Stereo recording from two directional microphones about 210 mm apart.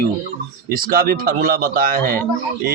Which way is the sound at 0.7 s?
45° right (ahead or behind).